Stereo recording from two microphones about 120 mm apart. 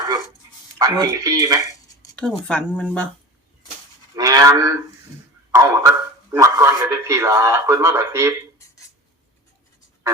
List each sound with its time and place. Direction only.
0.8 s a man's voice: 30° right (ahead or behind)
2.1 s speech: 5° left (ahead or behind)
4.1 s cattle: 30° right (ahead or behind)
5.5 s a man's voice: 25° right (ahead or behind)